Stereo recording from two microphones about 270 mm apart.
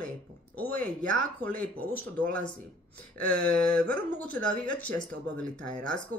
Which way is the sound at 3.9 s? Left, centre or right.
Centre.